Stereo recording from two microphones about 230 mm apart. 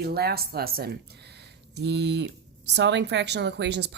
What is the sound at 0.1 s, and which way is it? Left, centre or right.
Speech, right.